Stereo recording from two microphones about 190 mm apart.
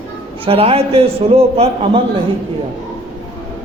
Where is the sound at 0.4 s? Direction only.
30° right (ahead or behind).